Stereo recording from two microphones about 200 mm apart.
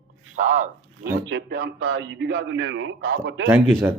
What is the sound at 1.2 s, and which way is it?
A man's voice, 65° right (ahead or behind).